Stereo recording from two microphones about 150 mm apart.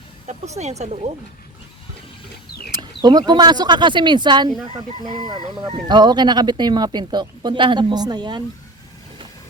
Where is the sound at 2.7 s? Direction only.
25° right (ahead or behind).